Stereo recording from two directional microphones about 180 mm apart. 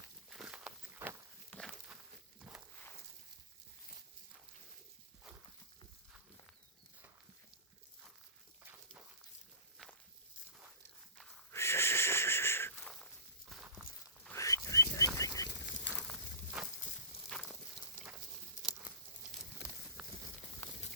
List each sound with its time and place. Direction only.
0.3 s walk: 5° right (ahead or behind)
1.5 s a sound: 5° left (ahead or behind)
11.5 s wheeze: 15° left (ahead or behind)
14.3 s a sound: 15° left (ahead or behind)
15.9 s walk: 5° left (ahead or behind)
17.1 s walk: 30° left (ahead or behind)
19.6 s clip-clop: 70° left (ahead or behind)
20.0 s a sound: 5° right (ahead or behind)
20.6 s walk: 10° left (ahead or behind)